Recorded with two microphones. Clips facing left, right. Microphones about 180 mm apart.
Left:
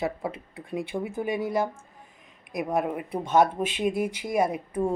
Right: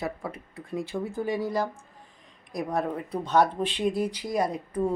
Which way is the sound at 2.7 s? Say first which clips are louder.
Left 2 dB; 15° left (ahead or behind).